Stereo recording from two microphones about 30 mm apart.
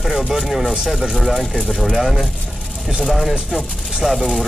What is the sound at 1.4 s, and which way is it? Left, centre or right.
Speech, centre.